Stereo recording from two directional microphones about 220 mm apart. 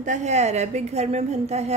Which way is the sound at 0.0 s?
35° right (ahead or behind).